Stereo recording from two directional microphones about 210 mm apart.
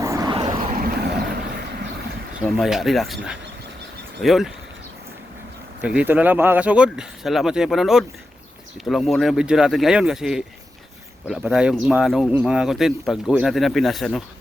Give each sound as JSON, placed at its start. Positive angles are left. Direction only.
{"t": 0.0, "sound": "a sound", "side_deg": -15}
{"t": 0.8, "sound": "vehicle", "side_deg": -50}
{"t": 2.4, "sound": "speech", "side_deg": 0}
{"t": 4.2, "sound": "speech", "side_deg": 0}
{"t": 5.8, "sound": "speech", "side_deg": -5}